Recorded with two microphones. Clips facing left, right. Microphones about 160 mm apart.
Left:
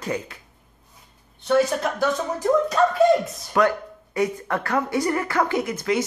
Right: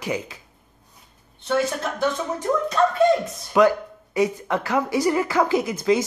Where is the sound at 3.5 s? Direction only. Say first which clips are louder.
Right 3 dB; 15° right (ahead or behind).